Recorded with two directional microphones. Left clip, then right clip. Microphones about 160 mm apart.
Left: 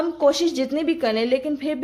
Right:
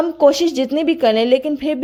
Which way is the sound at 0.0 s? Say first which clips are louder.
Right 6 dB; 40° right (ahead or behind).